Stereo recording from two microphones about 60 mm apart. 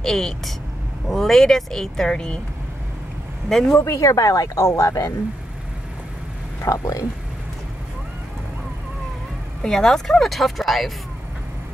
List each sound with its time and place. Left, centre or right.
0.0 s speech: centre
3.7 s speech: left
6.6 s speech: left
9.6 s speech: centre